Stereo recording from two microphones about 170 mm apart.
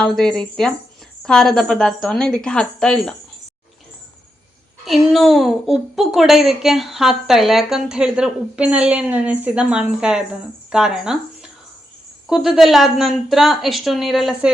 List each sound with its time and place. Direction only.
0.0 s a woman's voice: 5° left (ahead or behind)
4.9 s a woman's voice: centre (ahead or behind)
12.3 s a woman's voice: centre (ahead or behind)